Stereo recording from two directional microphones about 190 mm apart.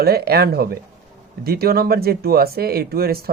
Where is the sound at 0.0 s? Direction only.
55° right (ahead or behind).